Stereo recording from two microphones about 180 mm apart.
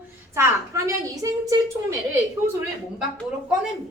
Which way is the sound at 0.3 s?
15° right (ahead or behind).